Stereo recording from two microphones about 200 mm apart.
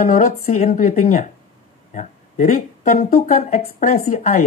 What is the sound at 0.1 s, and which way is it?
Speech, 45° left (ahead or behind).